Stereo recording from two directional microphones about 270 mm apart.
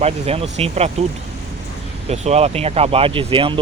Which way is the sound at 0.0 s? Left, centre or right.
Right.